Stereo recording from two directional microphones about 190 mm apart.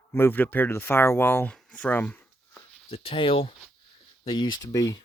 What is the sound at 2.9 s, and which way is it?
Speech, 30° left (ahead or behind).